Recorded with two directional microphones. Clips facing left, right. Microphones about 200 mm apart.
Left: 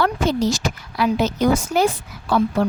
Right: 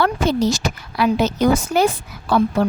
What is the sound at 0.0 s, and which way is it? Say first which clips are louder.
Speech: right 1 dB; 65° right (ahead or behind).